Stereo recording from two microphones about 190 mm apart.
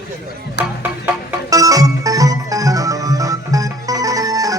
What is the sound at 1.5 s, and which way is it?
Music, 20° right (ahead or behind).